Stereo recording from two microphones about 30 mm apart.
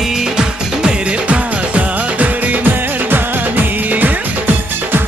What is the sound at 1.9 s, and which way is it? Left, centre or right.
Music, right.